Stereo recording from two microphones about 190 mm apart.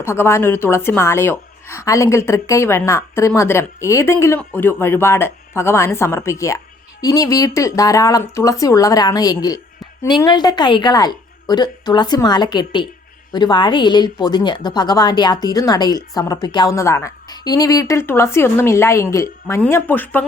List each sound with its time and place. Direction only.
0.0 s a woman's voice: 10° left (ahead or behind)